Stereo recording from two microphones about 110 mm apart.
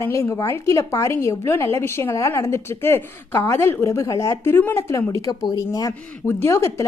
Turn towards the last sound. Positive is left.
turn(degrees=25)  # may be behind; listen again after turning